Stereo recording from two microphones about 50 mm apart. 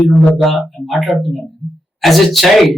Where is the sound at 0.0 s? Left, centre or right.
Left.